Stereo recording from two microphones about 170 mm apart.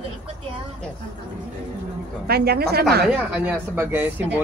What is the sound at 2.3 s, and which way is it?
Speech, 70° right (ahead or behind).